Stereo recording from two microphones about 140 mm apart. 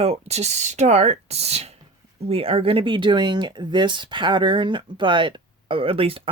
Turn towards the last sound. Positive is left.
turn(degrees=-40)  # may be behind; listen again after turning